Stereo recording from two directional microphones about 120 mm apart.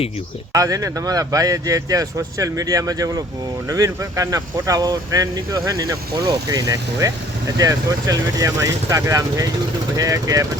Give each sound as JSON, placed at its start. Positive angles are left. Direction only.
{"t": 0.5, "sound": "speech", "side_deg": -30}